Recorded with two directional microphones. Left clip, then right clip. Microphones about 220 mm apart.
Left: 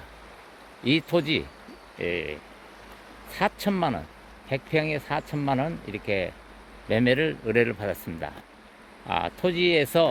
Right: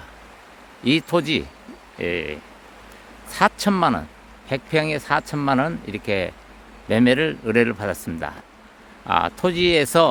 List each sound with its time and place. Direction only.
0.9 s speech: 15° right (ahead or behind)